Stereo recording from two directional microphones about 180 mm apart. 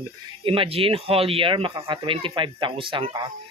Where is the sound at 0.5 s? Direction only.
30° right (ahead or behind).